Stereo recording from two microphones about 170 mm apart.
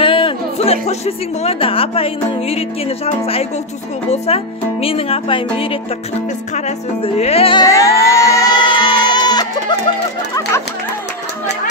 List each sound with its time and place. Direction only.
0.0 s a woman's voice: 30° left (ahead or behind)
7.6 s music: 20° left (ahead or behind)